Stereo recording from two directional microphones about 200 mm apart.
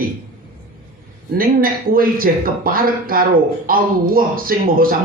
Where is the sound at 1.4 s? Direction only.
45° right (ahead or behind).